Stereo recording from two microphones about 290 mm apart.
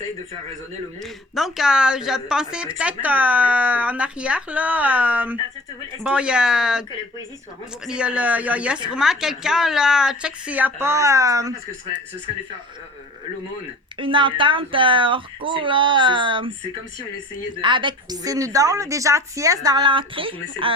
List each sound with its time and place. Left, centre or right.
1.0 s a woman's voice: centre
7.9 s a woman's voice: centre
14.0 s a woman's voice: centre
17.6 s a woman's voice: centre